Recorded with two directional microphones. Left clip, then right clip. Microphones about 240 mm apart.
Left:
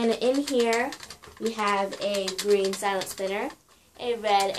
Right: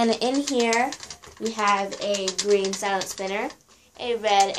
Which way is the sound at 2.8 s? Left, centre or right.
Centre.